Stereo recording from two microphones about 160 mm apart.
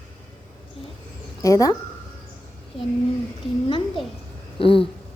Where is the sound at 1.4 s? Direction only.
20° left (ahead or behind).